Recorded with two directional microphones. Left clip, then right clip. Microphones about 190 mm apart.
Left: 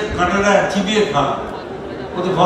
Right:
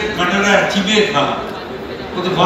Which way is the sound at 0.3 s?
20° left (ahead or behind).